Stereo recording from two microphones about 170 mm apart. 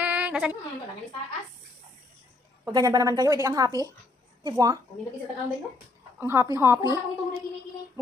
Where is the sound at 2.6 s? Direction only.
20° right (ahead or behind).